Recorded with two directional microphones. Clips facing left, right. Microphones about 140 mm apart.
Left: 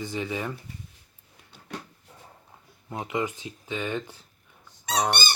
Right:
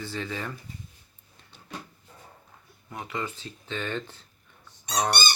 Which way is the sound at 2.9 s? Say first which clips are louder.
Left 5 dB; 20° left (ahead or behind).